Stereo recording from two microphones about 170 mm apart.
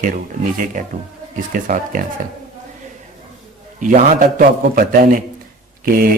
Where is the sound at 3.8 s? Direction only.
50° right (ahead or behind).